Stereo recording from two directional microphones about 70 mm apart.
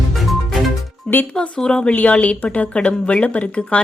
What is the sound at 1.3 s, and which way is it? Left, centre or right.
A woman's voice, centre.